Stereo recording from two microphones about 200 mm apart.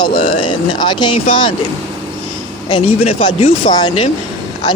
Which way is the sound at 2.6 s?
25° left (ahead or behind).